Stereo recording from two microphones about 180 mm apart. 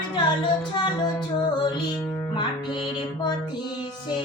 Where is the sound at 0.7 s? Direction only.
25° left (ahead or behind).